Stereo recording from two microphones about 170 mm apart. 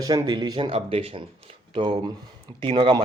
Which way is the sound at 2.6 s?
30° right (ahead or behind).